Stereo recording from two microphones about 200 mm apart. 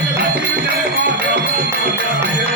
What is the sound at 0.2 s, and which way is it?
Music, 55° right (ahead or behind).